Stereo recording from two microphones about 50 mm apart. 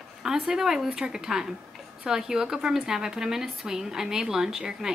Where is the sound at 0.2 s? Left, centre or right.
Centre.